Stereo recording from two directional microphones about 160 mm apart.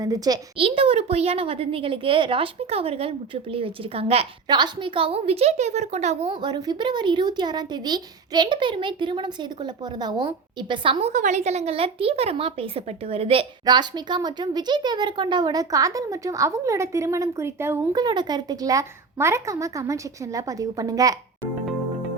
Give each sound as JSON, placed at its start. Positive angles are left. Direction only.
{"t": 0.0, "sound": "speech", "side_deg": -25}
{"t": 0.6, "sound": "a woman's voice", "side_deg": -35}
{"t": 4.4, "sound": "a woman's voice", "side_deg": -25}
{"t": 6.4, "sound": "speech", "side_deg": -30}
{"t": 11.1, "sound": "speech", "side_deg": -50}
{"t": 18.0, "sound": "speech", "side_deg": -25}